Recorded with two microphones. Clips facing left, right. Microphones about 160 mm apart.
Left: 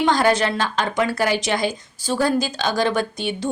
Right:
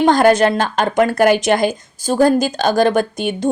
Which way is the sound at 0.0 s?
50° right (ahead or behind).